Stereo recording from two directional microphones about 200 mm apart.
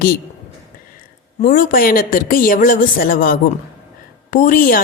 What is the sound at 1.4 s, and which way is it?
A woman's voice, 45° left (ahead or behind).